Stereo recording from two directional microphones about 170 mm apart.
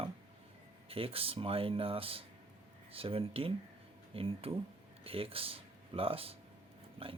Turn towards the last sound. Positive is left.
turn(degrees=-30)  # may be behind; listen again after turning